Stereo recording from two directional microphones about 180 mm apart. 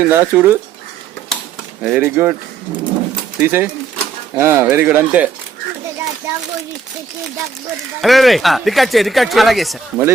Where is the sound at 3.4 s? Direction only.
10° right (ahead or behind).